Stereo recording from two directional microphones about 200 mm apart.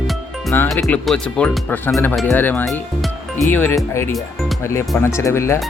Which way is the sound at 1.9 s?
15° left (ahead or behind).